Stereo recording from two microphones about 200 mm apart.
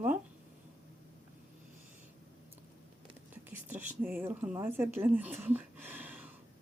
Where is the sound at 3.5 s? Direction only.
10° right (ahead or behind).